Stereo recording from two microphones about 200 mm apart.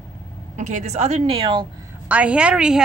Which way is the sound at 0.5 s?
35° right (ahead or behind).